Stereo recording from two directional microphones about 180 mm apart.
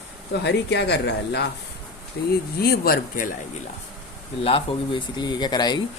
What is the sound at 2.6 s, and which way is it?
Speech, 60° left (ahead or behind).